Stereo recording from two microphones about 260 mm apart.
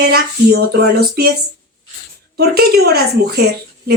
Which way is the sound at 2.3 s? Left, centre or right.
Right.